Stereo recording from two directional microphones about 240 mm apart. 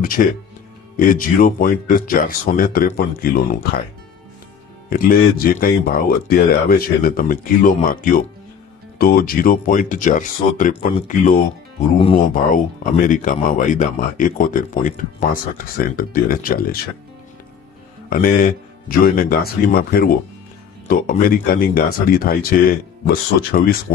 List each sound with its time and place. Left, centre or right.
0.0 s speech: left
4.8 s speech: left
12.5 s speech: left
18.1 s speech: left